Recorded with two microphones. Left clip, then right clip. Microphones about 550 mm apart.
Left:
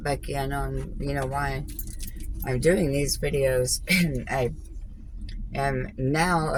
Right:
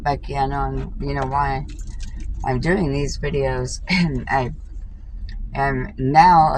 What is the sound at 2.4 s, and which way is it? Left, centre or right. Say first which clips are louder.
Speech: right 2 dB; left.